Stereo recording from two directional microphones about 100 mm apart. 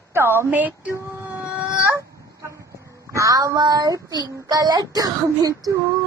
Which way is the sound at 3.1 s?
35° right (ahead or behind).